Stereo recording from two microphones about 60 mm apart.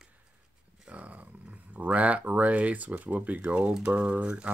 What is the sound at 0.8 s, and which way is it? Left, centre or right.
Speech, right.